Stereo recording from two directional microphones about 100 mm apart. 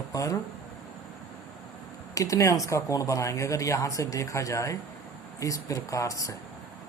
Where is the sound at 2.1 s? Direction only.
35° left (ahead or behind).